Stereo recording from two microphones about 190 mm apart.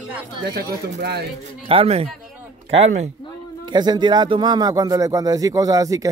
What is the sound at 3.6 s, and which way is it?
A man's voice, 25° right (ahead or behind).